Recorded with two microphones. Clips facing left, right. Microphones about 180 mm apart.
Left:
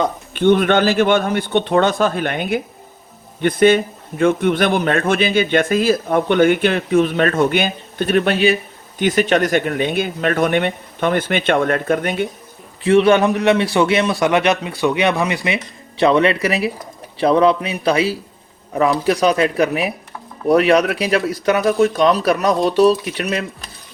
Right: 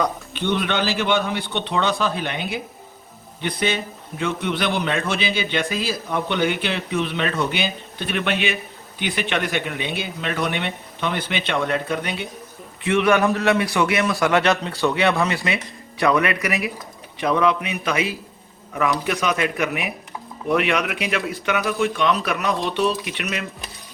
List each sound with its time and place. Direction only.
0.3 s speech: 50° left (ahead or behind)
12.8 s speech: 30° left (ahead or behind)
13.1 s a man's voice: 20° left (ahead or behind); by 23.5 s 35° left (ahead or behind)